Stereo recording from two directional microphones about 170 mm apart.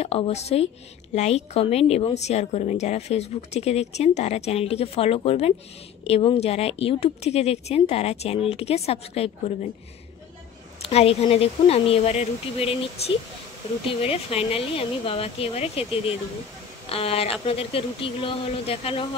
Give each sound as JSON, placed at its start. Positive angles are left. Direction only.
{"t": 0.0, "sound": "a woman's voice", "side_deg": 35}
{"t": 10.9, "sound": "a woman's voice", "side_deg": 40}